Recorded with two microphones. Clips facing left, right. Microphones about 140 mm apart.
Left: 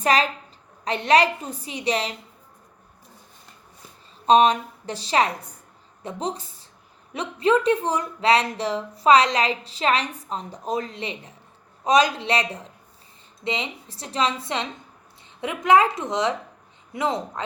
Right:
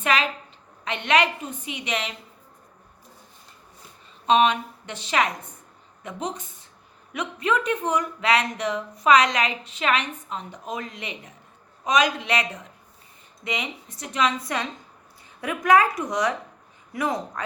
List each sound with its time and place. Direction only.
0.0 s speech: 35° left (ahead or behind)
4.3 s a woman's voice: 35° left (ahead or behind)